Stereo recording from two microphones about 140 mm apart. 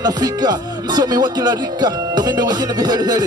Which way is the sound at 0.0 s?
30° right (ahead or behind).